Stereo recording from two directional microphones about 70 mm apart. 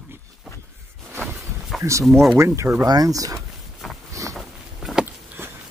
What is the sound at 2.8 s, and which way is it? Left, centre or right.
Speech, right.